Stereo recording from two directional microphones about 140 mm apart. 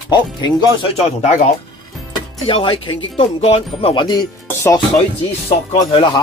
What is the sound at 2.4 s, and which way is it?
Speech, 40° left (ahead or behind).